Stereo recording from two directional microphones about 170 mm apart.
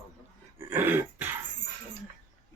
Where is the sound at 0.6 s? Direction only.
10° right (ahead or behind).